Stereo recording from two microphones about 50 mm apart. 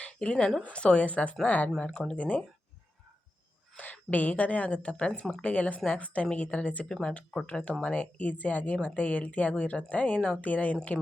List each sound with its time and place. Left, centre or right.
0.0 s a woman's voice: left
1.8 s speech: centre
2.1 s a woman's voice: left
3.8 s a woman's voice: left
6.8 s a woman's voice: centre
10.2 s speech: centre
10.4 s speech: left